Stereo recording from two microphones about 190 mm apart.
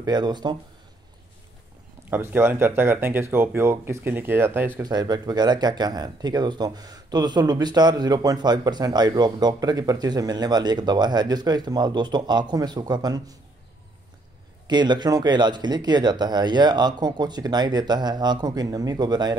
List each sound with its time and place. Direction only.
0.0 s speech: 20° right (ahead or behind)
2.0 s speech: 10° right (ahead or behind)
4.8 s speech: 20° right (ahead or behind)
14.7 s speech: 20° right (ahead or behind)